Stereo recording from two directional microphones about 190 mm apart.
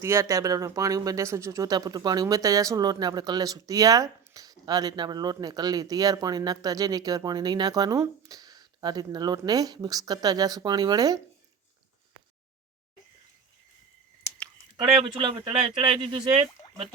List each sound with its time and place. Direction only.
0.0 s speech: 15° right (ahead or behind)
15.0 s speech: 25° right (ahead or behind)